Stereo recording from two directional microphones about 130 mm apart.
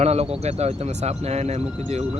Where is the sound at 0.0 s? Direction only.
55° right (ahead or behind).